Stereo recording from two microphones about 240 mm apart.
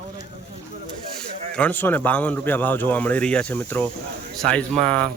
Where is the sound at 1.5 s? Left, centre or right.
Centre.